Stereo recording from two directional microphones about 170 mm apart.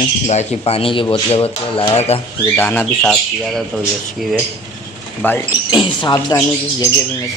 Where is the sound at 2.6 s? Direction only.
10° left (ahead or behind).